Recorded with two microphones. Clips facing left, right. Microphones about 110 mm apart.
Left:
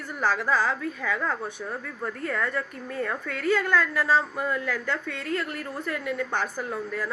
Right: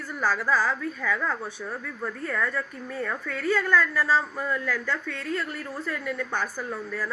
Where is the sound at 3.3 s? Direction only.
60° left (ahead or behind).